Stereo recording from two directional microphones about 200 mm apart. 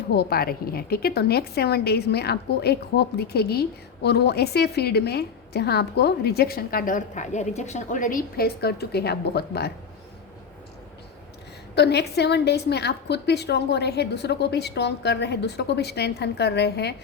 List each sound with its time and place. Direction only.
0.1 s a woman's voice: 50° left (ahead or behind)
11.7 s a woman's voice: 55° left (ahead or behind)